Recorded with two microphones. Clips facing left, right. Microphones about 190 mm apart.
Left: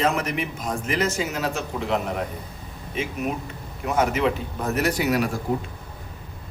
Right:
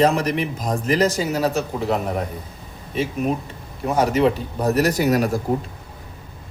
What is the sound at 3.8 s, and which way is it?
Speech, 35° right (ahead or behind).